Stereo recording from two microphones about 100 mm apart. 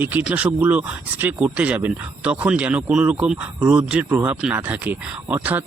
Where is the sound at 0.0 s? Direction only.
15° right (ahead or behind).